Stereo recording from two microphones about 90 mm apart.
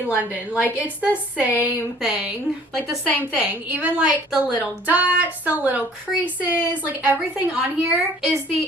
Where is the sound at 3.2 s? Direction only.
20° right (ahead or behind).